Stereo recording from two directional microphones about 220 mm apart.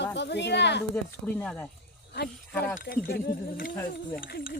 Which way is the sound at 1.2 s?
5° left (ahead or behind).